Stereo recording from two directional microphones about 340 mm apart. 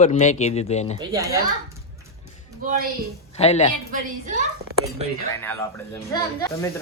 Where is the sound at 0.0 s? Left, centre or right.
Centre.